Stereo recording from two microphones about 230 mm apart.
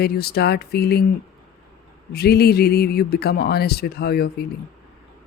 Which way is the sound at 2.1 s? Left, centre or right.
Left.